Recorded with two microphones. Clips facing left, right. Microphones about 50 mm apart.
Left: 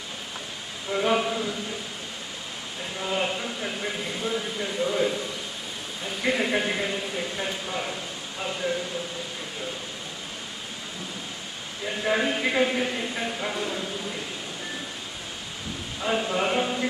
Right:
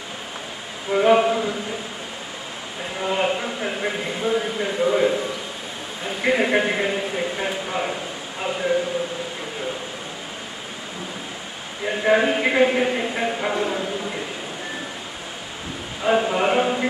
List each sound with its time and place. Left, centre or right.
0.9 s a man's voice: right
3.0 s a man's voice: right
11.8 s a man's voice: right
16.0 s chant: right